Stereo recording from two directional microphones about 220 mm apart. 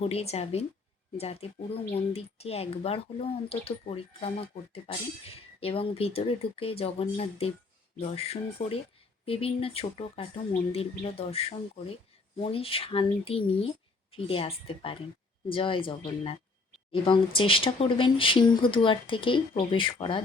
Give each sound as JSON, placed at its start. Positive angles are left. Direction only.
{"t": 0.0, "sound": "a woman's voice", "side_deg": 30}